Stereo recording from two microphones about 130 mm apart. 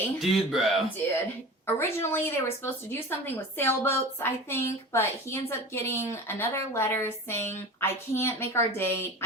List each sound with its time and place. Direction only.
0.2 s speech: centre (ahead or behind)
1.6 s a woman's voice: 20° left (ahead or behind)